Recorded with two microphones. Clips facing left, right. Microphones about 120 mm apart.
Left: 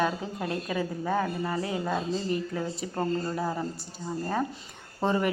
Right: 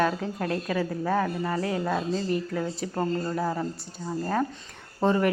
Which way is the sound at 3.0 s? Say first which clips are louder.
Right 1 dB; 5° left (ahead or behind).